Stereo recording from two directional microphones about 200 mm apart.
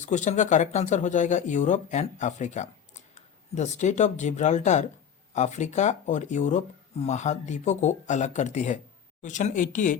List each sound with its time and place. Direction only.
0.0 s speech: 35° left (ahead or behind)